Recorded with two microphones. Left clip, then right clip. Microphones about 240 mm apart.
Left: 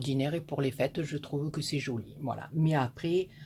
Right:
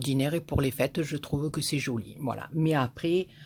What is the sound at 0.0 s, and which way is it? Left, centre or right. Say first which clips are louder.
Speech: right 3 dB; right.